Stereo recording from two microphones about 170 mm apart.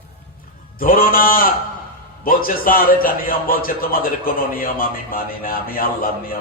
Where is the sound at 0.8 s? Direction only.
60° left (ahead or behind).